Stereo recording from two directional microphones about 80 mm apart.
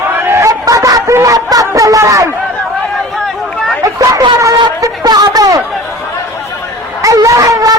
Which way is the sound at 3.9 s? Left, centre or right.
Right.